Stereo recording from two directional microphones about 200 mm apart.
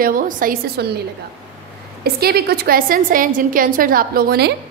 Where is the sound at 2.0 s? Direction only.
50° right (ahead or behind).